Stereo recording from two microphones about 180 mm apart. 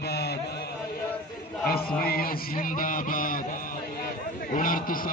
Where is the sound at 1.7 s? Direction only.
55° left (ahead or behind).